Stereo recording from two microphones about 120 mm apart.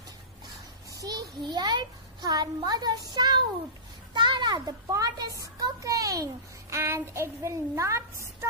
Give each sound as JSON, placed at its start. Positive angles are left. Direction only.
{"t": 1.0, "sound": "a child's voice", "side_deg": -35}
{"t": 4.1, "sound": "a sound", "side_deg": -40}
{"t": 5.4, "sound": "a child's voice", "side_deg": -30}